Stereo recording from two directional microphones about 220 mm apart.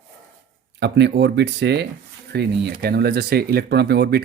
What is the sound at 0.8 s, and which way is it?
Speech, 50° right (ahead or behind).